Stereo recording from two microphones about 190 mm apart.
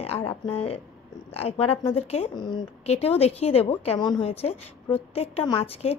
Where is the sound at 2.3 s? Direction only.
20° left (ahead or behind).